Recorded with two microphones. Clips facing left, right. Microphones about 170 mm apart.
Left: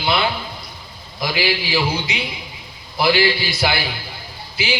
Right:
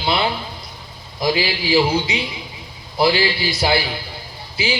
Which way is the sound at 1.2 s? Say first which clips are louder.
Right 2 dB; 30° right (ahead or behind).